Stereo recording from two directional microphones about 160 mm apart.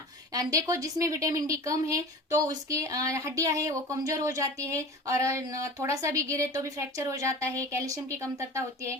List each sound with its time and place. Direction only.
0.3 s speech: 20° right (ahead or behind)